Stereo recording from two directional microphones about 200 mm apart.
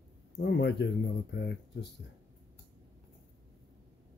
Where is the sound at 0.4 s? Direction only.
60° left (ahead or behind).